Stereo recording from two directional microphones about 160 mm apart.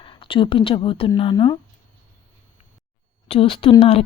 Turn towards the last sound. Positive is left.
turn(degrees=35)  # may be behind; listen again after turning